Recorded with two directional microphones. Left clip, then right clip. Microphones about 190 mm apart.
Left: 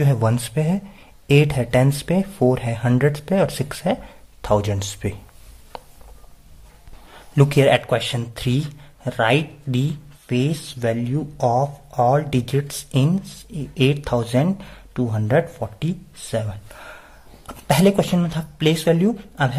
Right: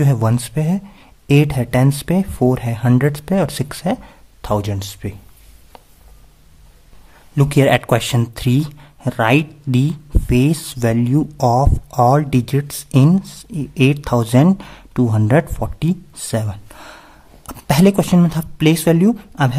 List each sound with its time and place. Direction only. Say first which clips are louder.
0.0 s speech: right 2 dB; 20° right (ahead or behind)
5.7 s a sound: left 6 dB; centre (ahead or behind)
7.3 s speech: right 1 dB; 20° right (ahead or behind)